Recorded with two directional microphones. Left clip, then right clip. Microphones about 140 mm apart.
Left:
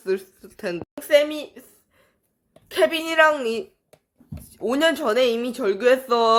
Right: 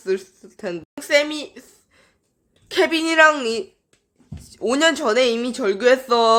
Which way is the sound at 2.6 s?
5° right (ahead or behind).